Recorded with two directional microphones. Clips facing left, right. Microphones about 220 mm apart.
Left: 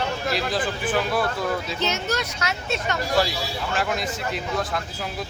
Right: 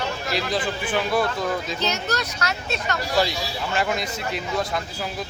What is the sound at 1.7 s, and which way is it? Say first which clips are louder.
Speech: even; 25° left (ahead or behind).